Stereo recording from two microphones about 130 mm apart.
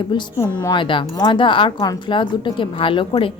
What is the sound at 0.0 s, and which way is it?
Speech, 35° left (ahead or behind).